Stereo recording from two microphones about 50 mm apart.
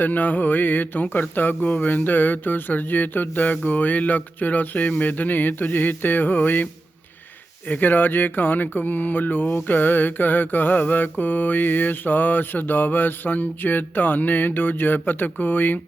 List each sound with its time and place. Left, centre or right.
0.0 s mantra: left
7.7 s mantra: left